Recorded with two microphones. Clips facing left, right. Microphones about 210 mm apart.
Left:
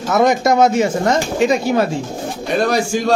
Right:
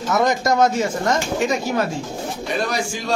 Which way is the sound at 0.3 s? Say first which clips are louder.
Left 4 dB; 15° left (ahead or behind).